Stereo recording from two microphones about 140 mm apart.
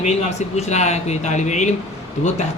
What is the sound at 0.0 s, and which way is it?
Speech, 55° left (ahead or behind).